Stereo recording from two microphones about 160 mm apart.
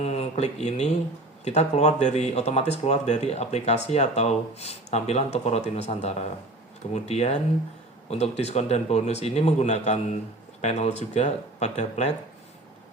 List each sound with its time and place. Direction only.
0.0 s speech: 40° left (ahead or behind)